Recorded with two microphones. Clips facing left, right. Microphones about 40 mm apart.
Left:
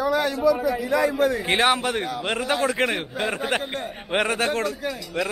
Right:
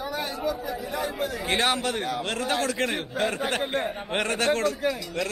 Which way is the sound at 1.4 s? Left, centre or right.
Centre.